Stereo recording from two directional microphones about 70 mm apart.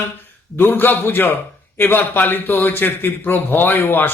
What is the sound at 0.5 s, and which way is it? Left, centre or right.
A man's voice, left.